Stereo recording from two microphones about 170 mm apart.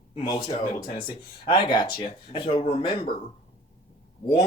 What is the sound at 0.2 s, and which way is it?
Speech, 30° left (ahead or behind).